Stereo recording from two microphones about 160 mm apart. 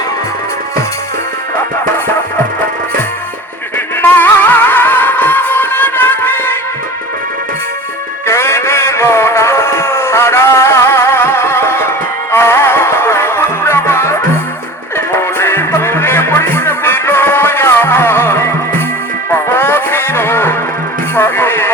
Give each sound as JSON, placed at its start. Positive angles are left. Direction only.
{"t": 4.0, "sound": "music", "side_deg": 10}
{"t": 8.3, "sound": "music", "side_deg": 15}